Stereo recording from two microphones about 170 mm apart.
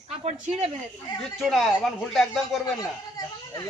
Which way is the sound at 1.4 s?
Centre (ahead or behind).